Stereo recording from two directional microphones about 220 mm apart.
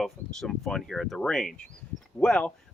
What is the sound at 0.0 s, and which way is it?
Speech, centre (ahead or behind).